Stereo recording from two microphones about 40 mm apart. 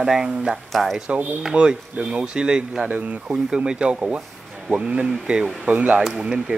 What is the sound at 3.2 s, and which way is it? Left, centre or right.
Speech, centre.